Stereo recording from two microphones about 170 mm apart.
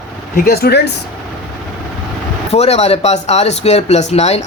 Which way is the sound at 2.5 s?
40° left (ahead or behind).